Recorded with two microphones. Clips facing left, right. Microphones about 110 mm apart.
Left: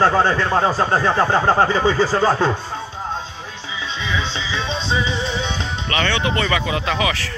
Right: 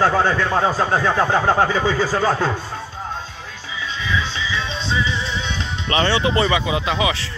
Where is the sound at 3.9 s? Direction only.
25° left (ahead or behind).